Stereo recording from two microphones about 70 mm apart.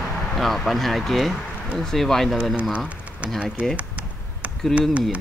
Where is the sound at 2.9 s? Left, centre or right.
Centre.